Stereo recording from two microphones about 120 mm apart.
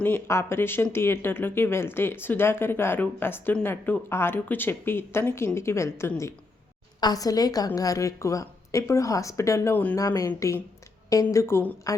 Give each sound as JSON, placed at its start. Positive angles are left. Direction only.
{"t": 0.0, "sound": "a woman's voice", "side_deg": 20}